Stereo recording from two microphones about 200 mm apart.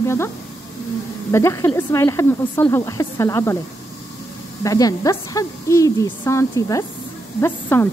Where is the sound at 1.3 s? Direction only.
15° left (ahead or behind).